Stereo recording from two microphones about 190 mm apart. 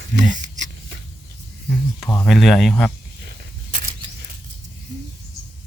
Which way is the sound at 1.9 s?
10° left (ahead or behind).